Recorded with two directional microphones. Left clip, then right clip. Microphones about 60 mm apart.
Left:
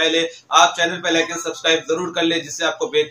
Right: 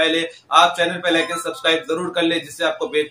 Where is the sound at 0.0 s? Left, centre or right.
Right.